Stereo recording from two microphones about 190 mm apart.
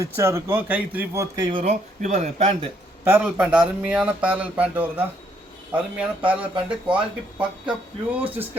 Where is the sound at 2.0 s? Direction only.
40° right (ahead or behind).